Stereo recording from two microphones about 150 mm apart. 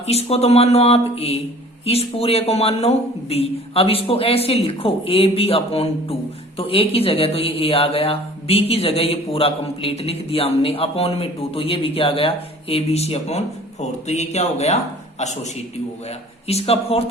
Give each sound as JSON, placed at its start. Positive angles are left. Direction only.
{"t": 0.0, "sound": "a man's voice", "side_deg": 45}
{"t": 16.5, "sound": "speech", "side_deg": 45}